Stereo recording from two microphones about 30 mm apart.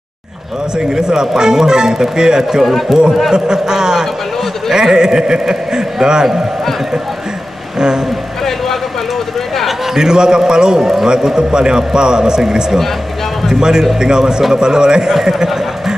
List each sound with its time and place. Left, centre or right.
0.7 s a man's voice: right
9.9 s a man's voice: right